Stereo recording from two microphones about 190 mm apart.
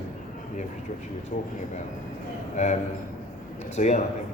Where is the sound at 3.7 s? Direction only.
35° left (ahead or behind).